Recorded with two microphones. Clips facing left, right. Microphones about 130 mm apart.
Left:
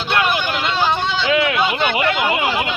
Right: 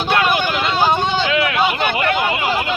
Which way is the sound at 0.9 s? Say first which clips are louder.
Right 3 dB; 15° right (ahead or behind).